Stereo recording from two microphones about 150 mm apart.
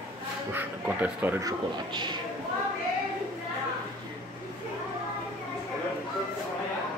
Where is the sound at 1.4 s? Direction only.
25° right (ahead or behind).